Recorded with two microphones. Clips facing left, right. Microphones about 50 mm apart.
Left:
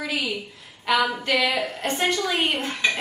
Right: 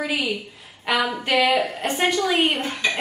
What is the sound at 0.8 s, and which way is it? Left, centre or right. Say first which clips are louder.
Speech: even; centre.